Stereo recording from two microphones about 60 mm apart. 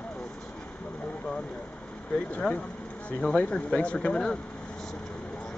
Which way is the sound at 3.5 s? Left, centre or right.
Centre.